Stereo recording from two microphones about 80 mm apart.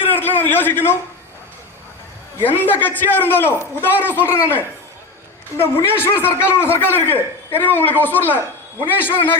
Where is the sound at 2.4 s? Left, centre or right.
Left.